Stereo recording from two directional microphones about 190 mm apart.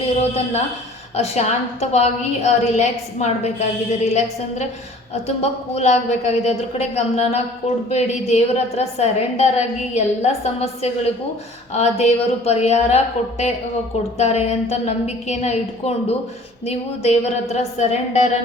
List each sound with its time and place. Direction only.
0.2 s a woman's voice: 35° left (ahead or behind)
14.2 s a woman's voice: 35° left (ahead or behind)